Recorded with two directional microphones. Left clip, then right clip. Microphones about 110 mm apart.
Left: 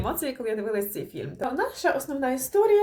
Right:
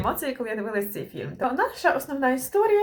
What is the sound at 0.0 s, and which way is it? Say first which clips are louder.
Speech: right 2 dB; 15° left (ahead or behind).